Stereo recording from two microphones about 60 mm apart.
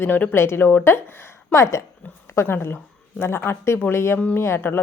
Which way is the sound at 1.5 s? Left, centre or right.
Left.